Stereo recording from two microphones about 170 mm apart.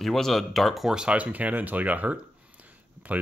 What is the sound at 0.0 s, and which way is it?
Speech, centre (ahead or behind).